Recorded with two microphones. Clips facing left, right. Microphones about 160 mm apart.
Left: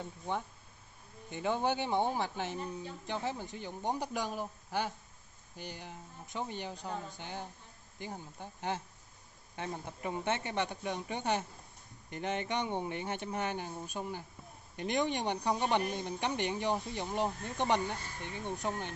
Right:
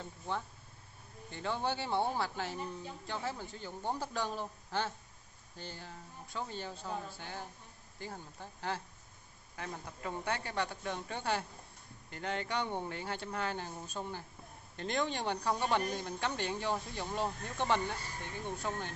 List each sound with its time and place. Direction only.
1.3 s speech: 15° left (ahead or behind)